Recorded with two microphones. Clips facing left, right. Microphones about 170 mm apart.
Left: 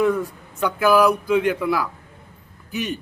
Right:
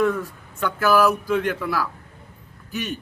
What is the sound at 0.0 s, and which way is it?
A man's voice, 10° left (ahead or behind).